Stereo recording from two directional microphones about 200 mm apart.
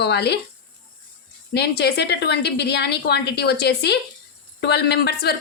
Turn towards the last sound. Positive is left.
turn(degrees=55)  # may be behind; listen again after turning